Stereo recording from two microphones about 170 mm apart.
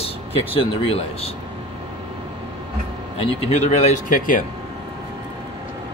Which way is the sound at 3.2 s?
35° left (ahead or behind).